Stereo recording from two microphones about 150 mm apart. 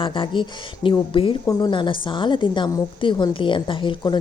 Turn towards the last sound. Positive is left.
turn(degrees=30)  # may be behind; listen again after turning